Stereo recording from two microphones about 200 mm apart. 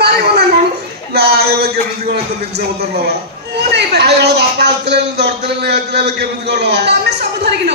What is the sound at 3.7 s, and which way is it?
A woman's voice, 55° right (ahead or behind).